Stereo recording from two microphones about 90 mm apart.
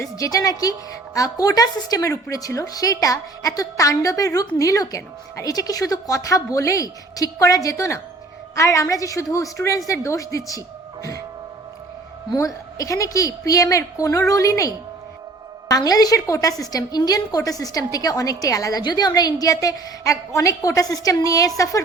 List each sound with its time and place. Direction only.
0.0 s a woman's voice: 40° left (ahead or behind)
12.3 s a woman's voice: 40° left (ahead or behind)
15.7 s a woman's voice: 45° left (ahead or behind)